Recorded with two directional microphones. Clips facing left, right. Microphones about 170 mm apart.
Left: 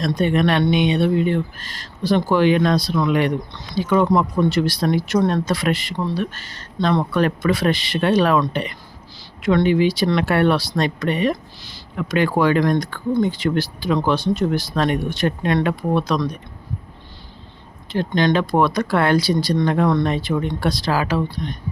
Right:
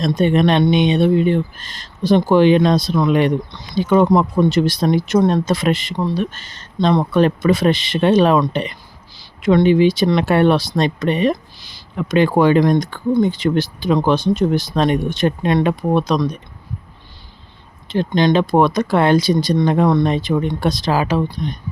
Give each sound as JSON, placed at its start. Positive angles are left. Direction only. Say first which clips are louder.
{"t": 0.2, "sound": "speech", "louder": "right 4 dB", "side_deg": -25}
{"t": 17.8, "sound": "speech", "louder": "right 3 dB", "side_deg": -20}